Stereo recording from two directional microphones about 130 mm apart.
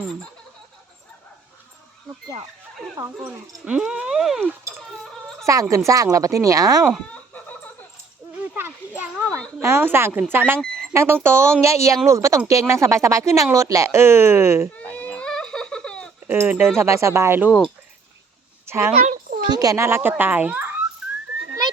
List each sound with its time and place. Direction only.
2.9 s speech: 20° right (ahead or behind)
3.7 s speech: 10° right (ahead or behind)
5.5 s speech: 25° right (ahead or behind)
7.1 s chicken: 10° left (ahead or behind)
9.0 s speech: 15° right (ahead or behind)
14.9 s baby cry: 10° left (ahead or behind)
16.2 s speech: 15° right (ahead or behind)
18.6 s a sound: 20° right (ahead or behind)
18.9 s a child's voice: 55° right (ahead or behind)
19.1 s a sound: 90° right
19.5 s a child's voice: 30° right (ahead or behind); by 20.8 s 15° right (ahead or behind)